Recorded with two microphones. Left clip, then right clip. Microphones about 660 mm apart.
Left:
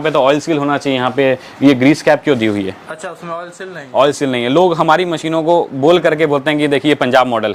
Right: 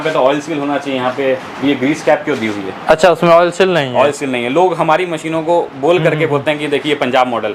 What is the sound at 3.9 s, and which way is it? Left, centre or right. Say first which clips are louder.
A man's voice: even; left.